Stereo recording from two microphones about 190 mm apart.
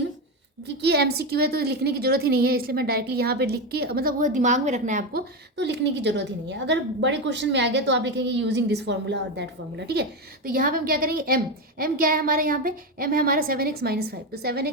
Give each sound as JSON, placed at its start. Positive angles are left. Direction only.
{"t": 0.8, "sound": "a woman's voice", "side_deg": -60}
{"t": 5.5, "sound": "a woman's voice", "side_deg": -65}